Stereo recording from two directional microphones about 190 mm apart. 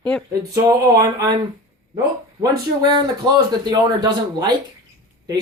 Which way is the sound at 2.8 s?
20° right (ahead or behind).